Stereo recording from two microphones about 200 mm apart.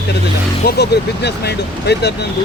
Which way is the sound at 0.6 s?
55° left (ahead or behind).